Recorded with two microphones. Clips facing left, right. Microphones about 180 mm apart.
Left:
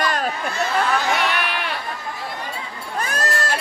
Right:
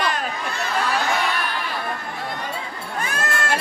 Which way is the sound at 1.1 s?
70° left (ahead or behind).